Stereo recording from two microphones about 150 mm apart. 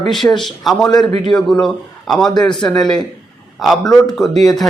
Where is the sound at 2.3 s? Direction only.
30° left (ahead or behind).